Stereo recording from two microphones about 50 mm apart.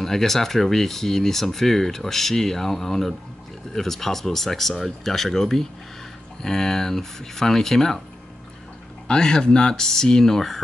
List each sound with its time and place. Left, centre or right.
0.0 s speech: centre
9.0 s speech: centre